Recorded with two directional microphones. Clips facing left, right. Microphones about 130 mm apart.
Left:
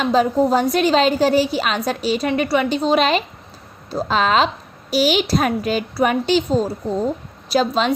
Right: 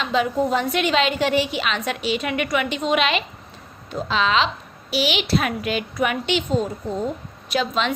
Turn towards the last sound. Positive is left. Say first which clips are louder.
# left 5 dB
turn(degrees=35)  # may be behind; listen again after turning